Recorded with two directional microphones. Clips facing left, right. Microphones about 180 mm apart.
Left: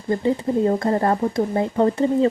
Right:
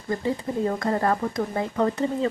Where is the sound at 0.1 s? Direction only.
30° left (ahead or behind).